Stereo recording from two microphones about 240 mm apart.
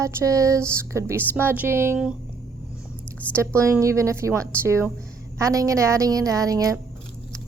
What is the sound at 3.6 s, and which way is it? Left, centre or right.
A woman's voice, centre.